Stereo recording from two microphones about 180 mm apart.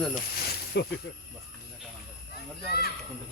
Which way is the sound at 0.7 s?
75° left (ahead or behind).